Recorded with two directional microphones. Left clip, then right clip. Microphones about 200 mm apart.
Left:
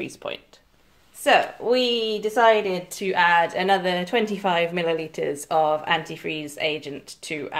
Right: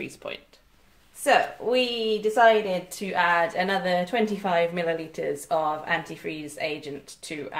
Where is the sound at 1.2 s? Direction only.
40° left (ahead or behind).